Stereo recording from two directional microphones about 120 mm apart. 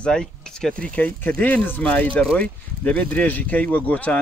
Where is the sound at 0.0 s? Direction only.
5° left (ahead or behind).